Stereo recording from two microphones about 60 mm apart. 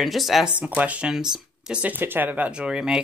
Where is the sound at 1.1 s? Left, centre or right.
Centre.